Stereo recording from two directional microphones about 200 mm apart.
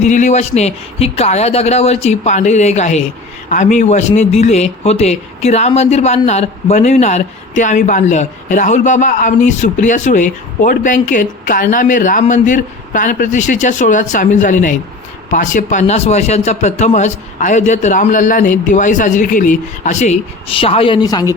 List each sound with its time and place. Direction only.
0.0 s a man's voice: 40° left (ahead or behind); by 21.2 s 20° left (ahead or behind)